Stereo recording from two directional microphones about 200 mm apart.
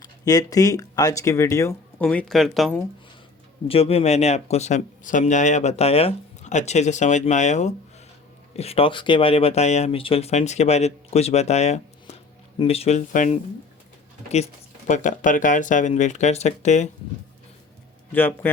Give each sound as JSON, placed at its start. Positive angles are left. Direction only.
{"t": 0.0, "sound": "speech", "side_deg": 20}
{"t": 3.7, "sound": "speech", "side_deg": 30}
{"t": 18.1, "sound": "speech", "side_deg": 10}